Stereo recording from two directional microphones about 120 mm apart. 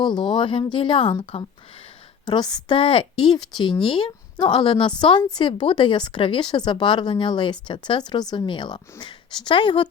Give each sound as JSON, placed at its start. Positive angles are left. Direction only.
{"t": 0.0, "sound": "a woman's voice", "side_deg": 40}